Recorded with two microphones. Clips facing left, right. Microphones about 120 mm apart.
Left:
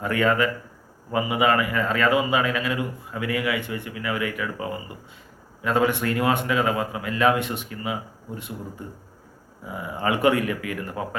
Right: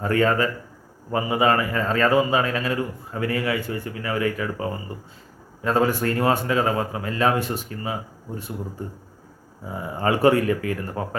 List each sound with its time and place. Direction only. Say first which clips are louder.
0.0 s a man's voice: right 1 dB; 35° right (ahead or behind)
9.6 s a man's voice: right 2 dB; 35° right (ahead or behind)